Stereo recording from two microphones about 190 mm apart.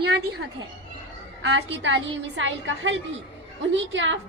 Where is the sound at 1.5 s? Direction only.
70° right (ahead or behind).